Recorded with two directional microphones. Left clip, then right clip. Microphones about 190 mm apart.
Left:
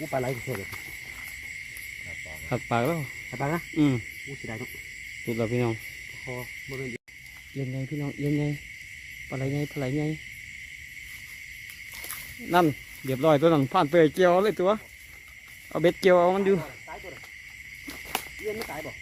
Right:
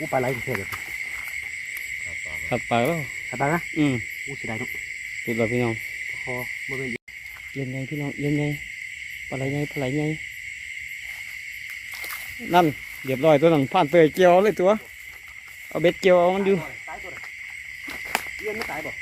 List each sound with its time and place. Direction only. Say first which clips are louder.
0.0 s speech: right 5 dB; 30° right (ahead or behind)
2.5 s speech: right 4 dB; 10° left (ahead or behind)
3.3 s speech: right 6 dB; 20° right (ahead or behind)
3.8 s speech: left 3 dB; 10° left (ahead or behind)
4.4 s speech: right 7 dB; 25° right (ahead or behind)
5.2 s speech: right 4 dB; 5° left (ahead or behind)
6.2 s owl: right 7 dB; 30° right (ahead or behind)
7.5 s speech: right 3 dB; centre (ahead or behind)
12.5 s speech: right 4 dB; centre (ahead or behind)
15.7 s speech: right 3 dB; 10° left (ahead or behind)
18.4 s speech: right 4 dB; centre (ahead or behind)